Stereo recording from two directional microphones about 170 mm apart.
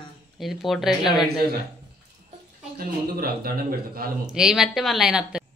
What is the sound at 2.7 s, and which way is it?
A man's voice, 60° right (ahead or behind).